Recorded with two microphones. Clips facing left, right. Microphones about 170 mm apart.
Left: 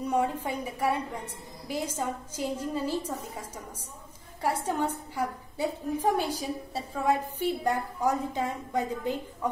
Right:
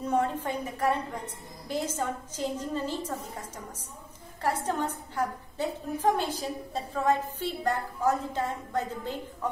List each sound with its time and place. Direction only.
0.2 s a woman's voice: 10° left (ahead or behind)